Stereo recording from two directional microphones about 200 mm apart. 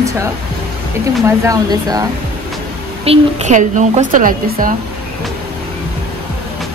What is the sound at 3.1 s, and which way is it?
A woman's voice, 35° right (ahead or behind).